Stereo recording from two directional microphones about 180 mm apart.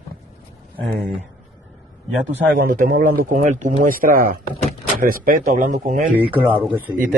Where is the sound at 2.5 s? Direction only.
55° right (ahead or behind).